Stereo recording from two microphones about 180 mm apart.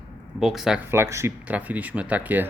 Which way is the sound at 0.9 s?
15° right (ahead or behind).